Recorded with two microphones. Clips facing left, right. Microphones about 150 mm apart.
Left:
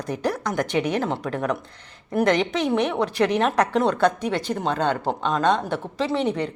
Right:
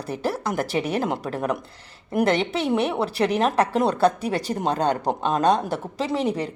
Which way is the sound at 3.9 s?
35° right (ahead or behind).